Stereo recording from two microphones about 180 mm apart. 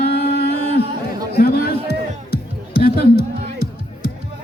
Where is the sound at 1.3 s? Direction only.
60° left (ahead or behind).